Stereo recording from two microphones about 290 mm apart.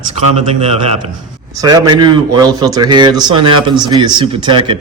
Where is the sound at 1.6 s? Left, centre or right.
Centre.